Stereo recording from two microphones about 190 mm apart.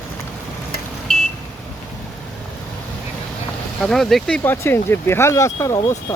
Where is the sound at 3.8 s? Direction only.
Centre (ahead or behind).